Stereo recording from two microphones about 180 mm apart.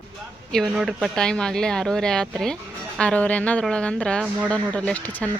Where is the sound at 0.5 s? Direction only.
Centre (ahead or behind).